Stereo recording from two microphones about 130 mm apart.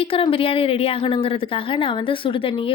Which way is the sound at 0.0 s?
45° left (ahead or behind).